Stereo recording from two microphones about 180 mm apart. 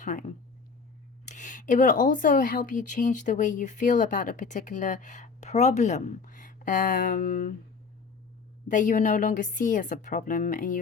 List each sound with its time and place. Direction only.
0.0 s speech: 45° left (ahead or behind)
8.6 s speech: 45° left (ahead or behind)